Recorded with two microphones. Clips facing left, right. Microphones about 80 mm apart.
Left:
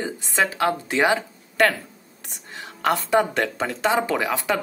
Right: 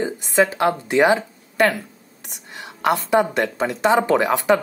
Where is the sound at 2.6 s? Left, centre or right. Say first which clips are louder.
Right 2 dB; centre.